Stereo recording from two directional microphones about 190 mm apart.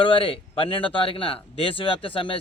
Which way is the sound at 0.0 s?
30° left (ahead or behind).